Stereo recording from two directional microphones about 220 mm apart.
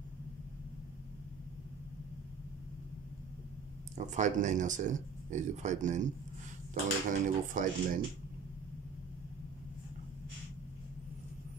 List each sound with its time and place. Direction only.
4.0 s speech: 35° right (ahead or behind)